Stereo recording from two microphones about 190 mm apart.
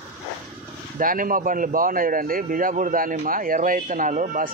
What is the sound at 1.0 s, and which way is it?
A man's voice, 45° right (ahead or behind).